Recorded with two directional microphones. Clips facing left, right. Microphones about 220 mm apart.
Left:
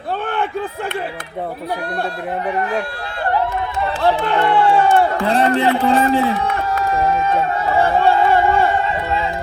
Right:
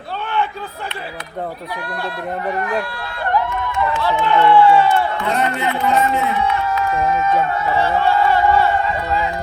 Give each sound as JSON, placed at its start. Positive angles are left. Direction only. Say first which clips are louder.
{"t": 3.5, "sound": "run", "louder": "right 1 dB", "side_deg": 35}
{"t": 4.1, "sound": "a man's voice", "louder": "right 1 dB", "side_deg": 35}
{"t": 4.4, "sound": "speech", "louder": "right 4 dB", "side_deg": 50}
{"t": 4.8, "sound": "a sound", "louder": "left 2 dB", "side_deg": 50}
{"t": 5.2, "sound": "a man's voice", "louder": "left 5 dB", "side_deg": 30}
{"t": 6.8, "sound": "run", "louder": "left 2 dB", "side_deg": 35}
{"t": 7.8, "sound": "a sound", "louder": "left 3 dB", "side_deg": 50}